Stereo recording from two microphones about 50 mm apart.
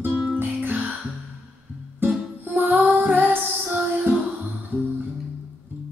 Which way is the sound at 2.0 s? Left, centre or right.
Right.